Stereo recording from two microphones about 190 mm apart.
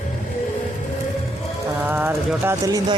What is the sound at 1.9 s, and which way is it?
Speech, 10° right (ahead or behind).